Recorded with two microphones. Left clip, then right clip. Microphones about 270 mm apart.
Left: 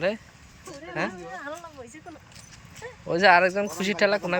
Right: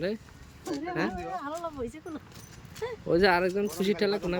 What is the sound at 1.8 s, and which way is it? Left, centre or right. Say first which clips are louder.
Speech: right 7 dB; right.